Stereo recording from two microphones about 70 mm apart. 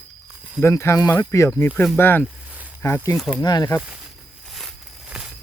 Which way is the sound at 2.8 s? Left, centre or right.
Left.